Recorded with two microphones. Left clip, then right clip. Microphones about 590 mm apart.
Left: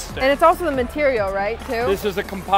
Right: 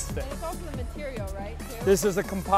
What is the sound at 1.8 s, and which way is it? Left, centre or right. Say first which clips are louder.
Speech: right 1 dB; right.